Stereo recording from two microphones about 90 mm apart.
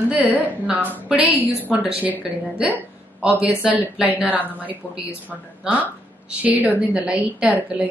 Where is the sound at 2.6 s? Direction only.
15° right (ahead or behind).